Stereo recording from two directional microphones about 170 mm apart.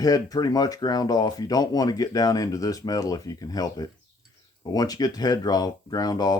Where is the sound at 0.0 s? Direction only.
20° left (ahead or behind).